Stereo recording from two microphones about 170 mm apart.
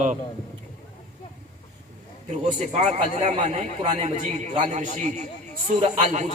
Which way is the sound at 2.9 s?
45° right (ahead or behind).